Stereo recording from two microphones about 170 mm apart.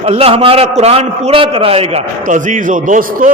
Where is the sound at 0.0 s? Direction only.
35° right (ahead or behind).